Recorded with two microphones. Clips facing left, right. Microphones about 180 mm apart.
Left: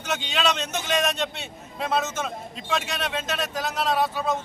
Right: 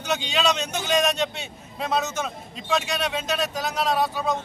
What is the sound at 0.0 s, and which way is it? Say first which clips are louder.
A man's voice: right 2 dB; 5° left (ahead or behind).